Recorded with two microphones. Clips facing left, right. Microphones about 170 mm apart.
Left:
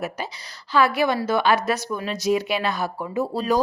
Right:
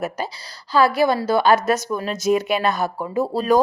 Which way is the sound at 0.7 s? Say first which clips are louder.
Right 3 dB; 35° right (ahead or behind).